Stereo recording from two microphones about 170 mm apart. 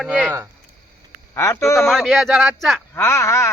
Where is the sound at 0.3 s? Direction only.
15° right (ahead or behind).